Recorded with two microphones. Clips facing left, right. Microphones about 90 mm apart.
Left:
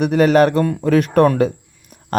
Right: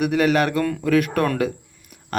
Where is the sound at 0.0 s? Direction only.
35° left (ahead or behind).